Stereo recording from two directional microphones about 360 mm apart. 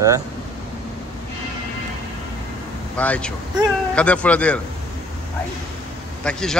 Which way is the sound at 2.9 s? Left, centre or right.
Centre.